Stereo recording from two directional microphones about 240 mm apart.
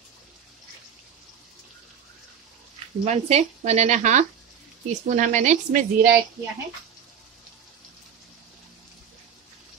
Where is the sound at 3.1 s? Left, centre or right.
Right.